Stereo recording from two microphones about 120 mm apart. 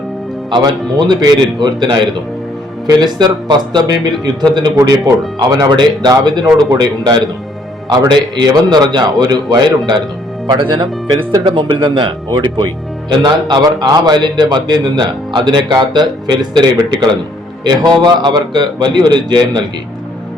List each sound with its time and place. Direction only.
0.5 s a man's voice: 35° right (ahead or behind)